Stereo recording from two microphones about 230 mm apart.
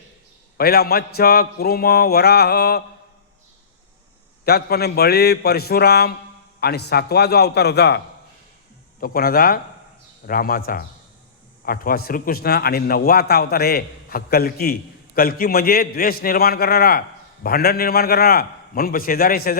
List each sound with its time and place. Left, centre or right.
0.5 s mantra: left
4.4 s mantra: left
9.0 s a man's voice: left